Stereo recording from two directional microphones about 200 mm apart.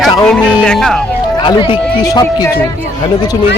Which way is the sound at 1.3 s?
25° left (ahead or behind).